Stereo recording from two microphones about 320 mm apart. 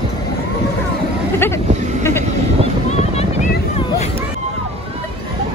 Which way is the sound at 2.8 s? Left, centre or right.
Centre.